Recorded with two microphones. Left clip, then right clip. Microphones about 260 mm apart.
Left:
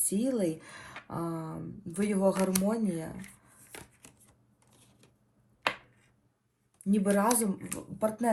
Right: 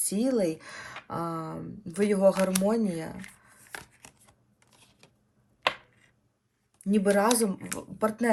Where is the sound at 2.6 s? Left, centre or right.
Centre.